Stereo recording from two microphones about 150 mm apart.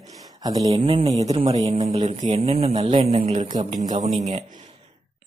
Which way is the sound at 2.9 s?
45° right (ahead or behind).